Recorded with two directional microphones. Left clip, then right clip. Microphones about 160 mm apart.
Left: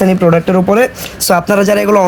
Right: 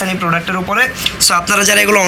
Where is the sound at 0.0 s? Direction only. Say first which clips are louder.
Left 6 dB; 85° left.